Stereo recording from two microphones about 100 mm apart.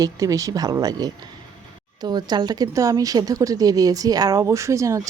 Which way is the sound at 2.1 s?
45° right (ahead or behind).